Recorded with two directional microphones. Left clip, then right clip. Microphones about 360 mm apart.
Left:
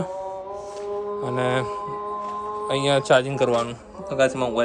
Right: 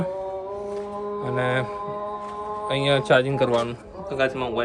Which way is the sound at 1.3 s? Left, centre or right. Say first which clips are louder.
Even; centre.